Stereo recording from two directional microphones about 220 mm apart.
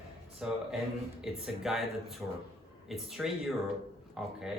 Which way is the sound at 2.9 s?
Centre (ahead or behind).